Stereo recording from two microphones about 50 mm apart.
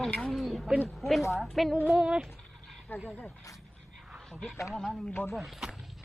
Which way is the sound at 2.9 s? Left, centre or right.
Left.